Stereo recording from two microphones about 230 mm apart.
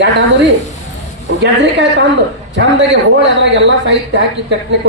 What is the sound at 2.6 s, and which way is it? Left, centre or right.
Speech, right.